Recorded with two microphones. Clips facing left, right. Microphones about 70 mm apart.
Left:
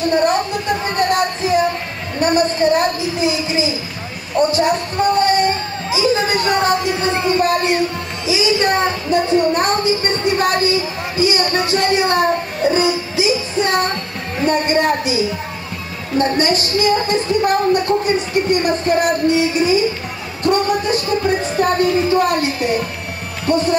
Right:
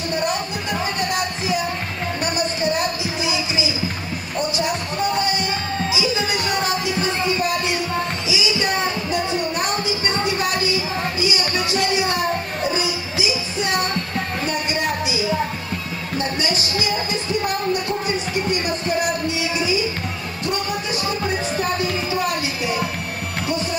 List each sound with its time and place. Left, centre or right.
0.9 s music: left
14.4 s a sound: left
16.2 s speech: left
20.4 s music: left
21.5 s speech: left